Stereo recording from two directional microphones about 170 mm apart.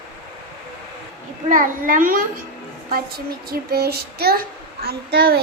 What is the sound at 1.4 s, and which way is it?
A child's voice, 50° right (ahead or behind).